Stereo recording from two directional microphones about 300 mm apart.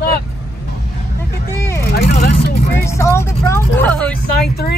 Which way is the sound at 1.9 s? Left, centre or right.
Left.